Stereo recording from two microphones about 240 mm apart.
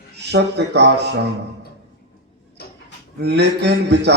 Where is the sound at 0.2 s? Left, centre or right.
Right.